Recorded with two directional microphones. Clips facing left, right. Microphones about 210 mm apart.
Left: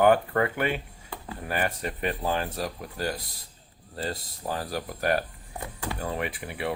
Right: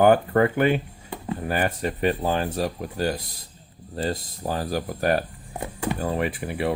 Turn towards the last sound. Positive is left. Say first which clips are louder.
# right 6 dB
turn(degrees=-35)  # may be behind; listen again after turning